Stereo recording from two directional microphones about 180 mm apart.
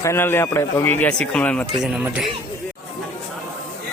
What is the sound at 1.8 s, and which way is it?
Speech, 5° right (ahead or behind).